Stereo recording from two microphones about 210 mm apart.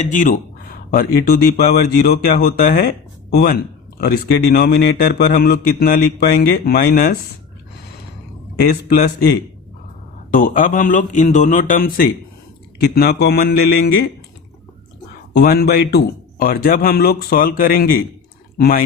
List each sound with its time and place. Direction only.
0.0 s a man's voice: 40° left (ahead or behind)
8.7 s a man's voice: 50° left (ahead or behind)
10.3 s a man's voice: 40° left (ahead or behind)
15.3 s a man's voice: 45° left (ahead or behind)